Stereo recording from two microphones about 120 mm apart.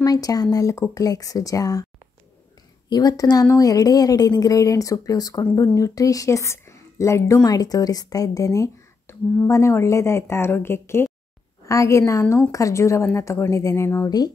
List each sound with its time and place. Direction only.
0.0 s a woman's voice: 30° left (ahead or behind)
2.9 s a woman's voice: 35° left (ahead or behind)